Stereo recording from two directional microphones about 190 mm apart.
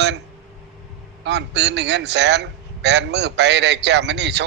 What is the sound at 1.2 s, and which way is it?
A man's voice, 65° right (ahead or behind).